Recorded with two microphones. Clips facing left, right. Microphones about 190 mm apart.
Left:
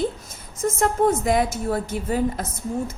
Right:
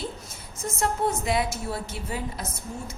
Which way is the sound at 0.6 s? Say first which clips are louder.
Left 7 dB; 50° left (ahead or behind).